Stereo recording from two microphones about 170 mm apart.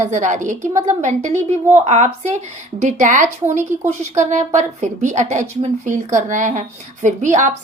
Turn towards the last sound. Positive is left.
turn(degrees=-45)  # may be behind; listen again after turning